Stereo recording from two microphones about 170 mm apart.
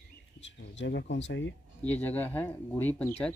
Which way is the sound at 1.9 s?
10° left (ahead or behind).